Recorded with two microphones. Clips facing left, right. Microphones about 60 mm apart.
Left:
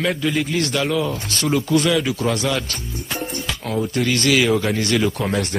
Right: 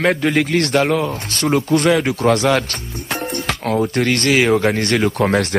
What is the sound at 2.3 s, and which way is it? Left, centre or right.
Speech, right.